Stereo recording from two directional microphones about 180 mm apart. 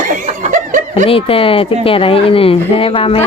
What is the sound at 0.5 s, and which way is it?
Snicker, 45° right (ahead or behind).